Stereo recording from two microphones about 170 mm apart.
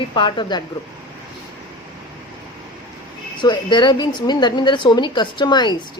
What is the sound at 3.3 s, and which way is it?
A woman's voice, 25° left (ahead or behind).